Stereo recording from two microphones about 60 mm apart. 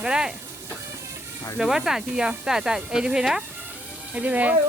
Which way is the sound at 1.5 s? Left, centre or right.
Centre.